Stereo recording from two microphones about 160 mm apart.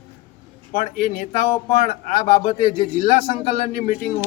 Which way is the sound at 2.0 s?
45° left (ahead or behind).